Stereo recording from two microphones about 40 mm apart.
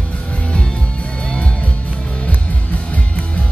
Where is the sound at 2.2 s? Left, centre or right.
Left.